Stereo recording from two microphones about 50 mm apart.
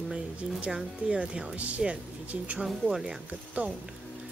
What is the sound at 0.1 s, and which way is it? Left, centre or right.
Music, right.